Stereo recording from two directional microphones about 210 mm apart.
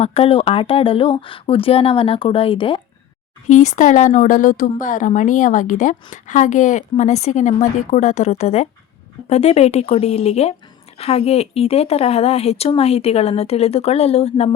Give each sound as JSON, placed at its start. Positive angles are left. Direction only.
{"t": 0.0, "sound": "a woman's voice", "side_deg": 30}